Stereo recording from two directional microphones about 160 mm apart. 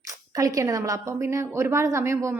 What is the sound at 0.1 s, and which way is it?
A woman's voice, 20° right (ahead or behind).